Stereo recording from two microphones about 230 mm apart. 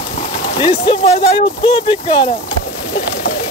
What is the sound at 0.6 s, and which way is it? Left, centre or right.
Speech, left.